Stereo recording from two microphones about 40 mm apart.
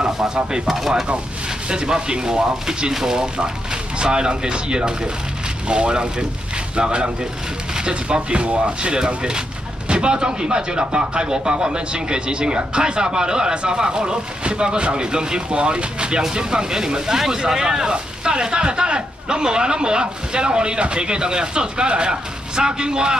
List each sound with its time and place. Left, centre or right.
0.0 s speech: centre
0.7 s speech: centre
1.7 s speech: right